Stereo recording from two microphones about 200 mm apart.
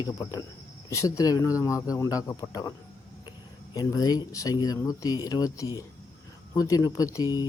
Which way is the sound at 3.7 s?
20° left (ahead or behind).